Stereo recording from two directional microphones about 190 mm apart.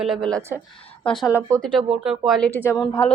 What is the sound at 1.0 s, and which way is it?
Speech, 5° left (ahead or behind).